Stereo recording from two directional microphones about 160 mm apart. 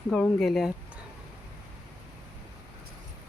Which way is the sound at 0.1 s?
5° left (ahead or behind).